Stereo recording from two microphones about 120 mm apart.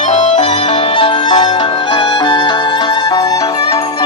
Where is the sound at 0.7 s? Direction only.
50° left (ahead or behind); by 3.5 s 30° left (ahead or behind).